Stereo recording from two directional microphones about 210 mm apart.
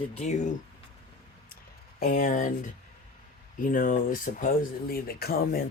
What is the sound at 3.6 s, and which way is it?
Speech, 40° left (ahead or behind).